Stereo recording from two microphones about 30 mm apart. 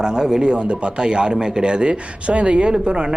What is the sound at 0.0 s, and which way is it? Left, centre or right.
Speech, right.